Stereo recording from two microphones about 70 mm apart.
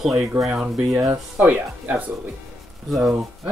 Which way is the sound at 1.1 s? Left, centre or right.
Right.